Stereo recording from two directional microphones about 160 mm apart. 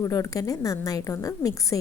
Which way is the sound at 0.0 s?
20° left (ahead or behind).